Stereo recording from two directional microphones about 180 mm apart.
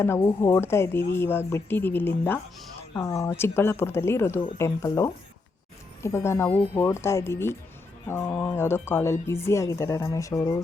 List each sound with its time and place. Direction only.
0.4 s speech: 15° left (ahead or behind)